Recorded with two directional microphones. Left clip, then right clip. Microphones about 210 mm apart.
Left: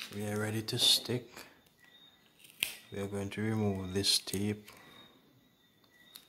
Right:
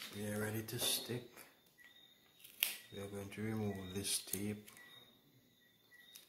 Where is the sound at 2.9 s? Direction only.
40° left (ahead or behind).